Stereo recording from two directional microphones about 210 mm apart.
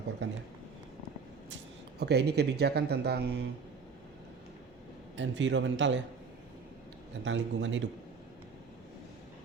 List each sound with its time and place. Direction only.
0.2 s a man's voice: 55° right (ahead or behind)
2.0 s speech: 50° right (ahead or behind)
5.1 s a man's voice: 60° right (ahead or behind)
7.3 s a man's voice: 65° right (ahead or behind)